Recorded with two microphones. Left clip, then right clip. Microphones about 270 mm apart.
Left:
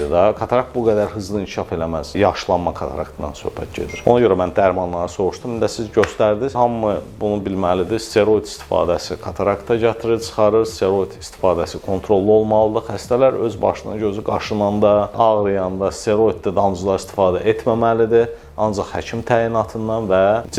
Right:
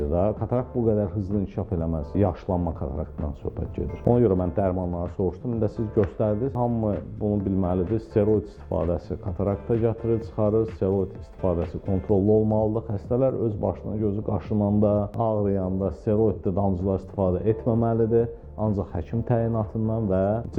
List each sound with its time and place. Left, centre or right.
0.0 s speech: centre
5.5 s speech: centre
8.3 s speech: left
8.9 s speech: centre
11.5 s speech: left
12.7 s speech: centre